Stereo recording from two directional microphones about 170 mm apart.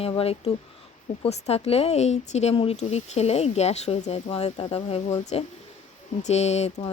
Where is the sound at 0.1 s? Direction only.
35° left (ahead or behind).